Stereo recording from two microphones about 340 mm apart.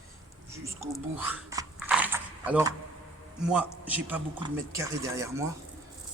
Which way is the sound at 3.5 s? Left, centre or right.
Centre.